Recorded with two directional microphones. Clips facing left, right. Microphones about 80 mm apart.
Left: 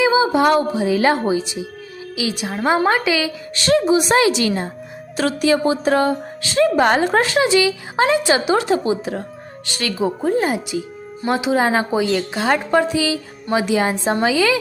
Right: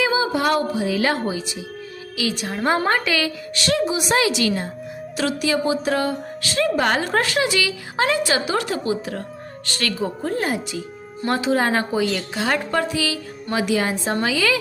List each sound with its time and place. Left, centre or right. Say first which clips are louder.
0.0 s a woman's voice: left 5 dB; left
3.5 s a woman's voice: left 7 dB; left